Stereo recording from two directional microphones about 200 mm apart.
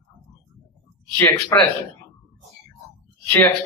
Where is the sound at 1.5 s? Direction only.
15° left (ahead or behind).